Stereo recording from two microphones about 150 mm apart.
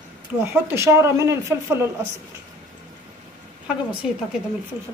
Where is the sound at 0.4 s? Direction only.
15° right (ahead or behind).